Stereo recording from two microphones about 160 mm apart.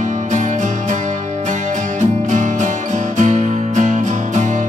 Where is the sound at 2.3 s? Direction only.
50° right (ahead or behind).